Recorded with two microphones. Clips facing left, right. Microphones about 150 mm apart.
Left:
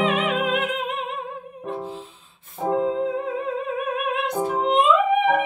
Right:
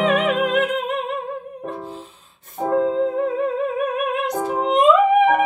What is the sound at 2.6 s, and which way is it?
Music, 45° right (ahead or behind).